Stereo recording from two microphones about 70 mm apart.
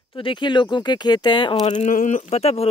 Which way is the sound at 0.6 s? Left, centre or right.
Left.